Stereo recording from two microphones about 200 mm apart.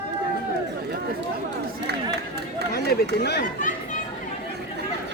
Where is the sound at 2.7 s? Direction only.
55° left (ahead or behind).